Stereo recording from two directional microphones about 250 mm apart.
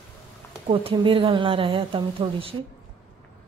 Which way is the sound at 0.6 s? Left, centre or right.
Right.